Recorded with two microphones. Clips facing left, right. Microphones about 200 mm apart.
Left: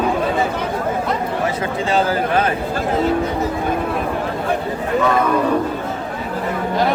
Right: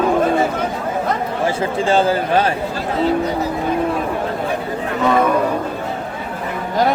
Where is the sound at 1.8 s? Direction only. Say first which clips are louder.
Right 2 dB; 30° right (ahead or behind).